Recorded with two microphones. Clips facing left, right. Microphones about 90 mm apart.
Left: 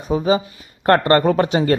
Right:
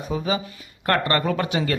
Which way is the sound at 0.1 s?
30° left (ahead or behind).